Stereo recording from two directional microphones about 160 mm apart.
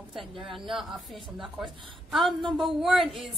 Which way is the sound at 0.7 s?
Centre (ahead or behind).